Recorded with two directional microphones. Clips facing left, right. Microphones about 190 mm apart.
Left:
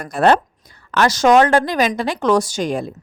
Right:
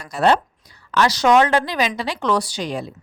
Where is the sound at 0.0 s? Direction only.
50° left (ahead or behind).